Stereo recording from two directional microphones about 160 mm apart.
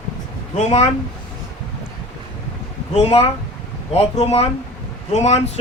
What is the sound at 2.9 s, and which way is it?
Speech, 40° left (ahead or behind).